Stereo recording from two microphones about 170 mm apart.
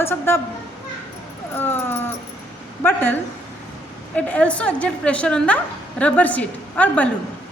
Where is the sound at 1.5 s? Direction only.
15° left (ahead or behind).